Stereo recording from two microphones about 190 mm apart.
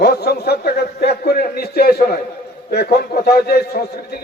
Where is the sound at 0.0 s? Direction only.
55° left (ahead or behind).